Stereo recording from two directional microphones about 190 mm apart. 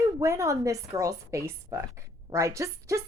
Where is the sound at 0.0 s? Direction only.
15° right (ahead or behind).